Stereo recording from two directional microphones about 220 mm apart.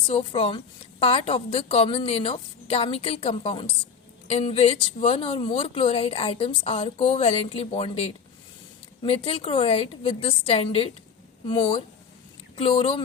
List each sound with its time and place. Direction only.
0.1 s speech: 25° left (ahead or behind)